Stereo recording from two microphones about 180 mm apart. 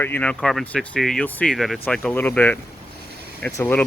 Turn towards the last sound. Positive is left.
turn(degrees=10)  # may be behind; listen again after turning